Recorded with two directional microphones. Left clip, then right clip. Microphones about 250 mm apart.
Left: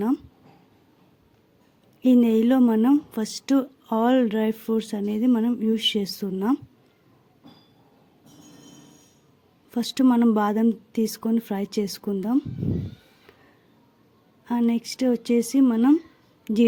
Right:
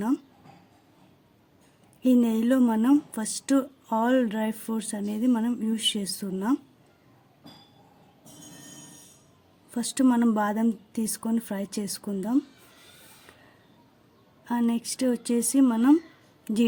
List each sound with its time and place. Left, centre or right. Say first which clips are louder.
2.0 s speech: left 4 dB; left
9.7 s speech: left 3 dB; left
14.4 s speech: left 3 dB; left